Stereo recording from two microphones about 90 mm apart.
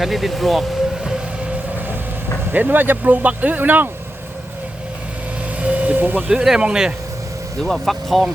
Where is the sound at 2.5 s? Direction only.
20° right (ahead or behind).